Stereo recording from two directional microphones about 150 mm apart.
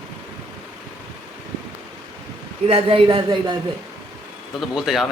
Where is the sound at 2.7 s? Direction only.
40° right (ahead or behind).